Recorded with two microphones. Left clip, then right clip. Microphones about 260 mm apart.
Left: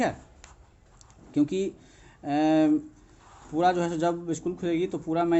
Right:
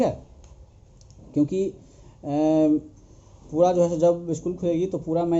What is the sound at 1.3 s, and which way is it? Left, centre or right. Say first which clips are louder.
Speech: right 3 dB; centre.